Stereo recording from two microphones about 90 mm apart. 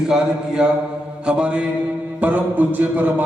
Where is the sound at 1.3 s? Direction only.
10° right (ahead or behind).